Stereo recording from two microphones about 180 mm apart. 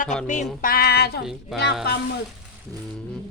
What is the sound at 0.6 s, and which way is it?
Music, 55° left (ahead or behind).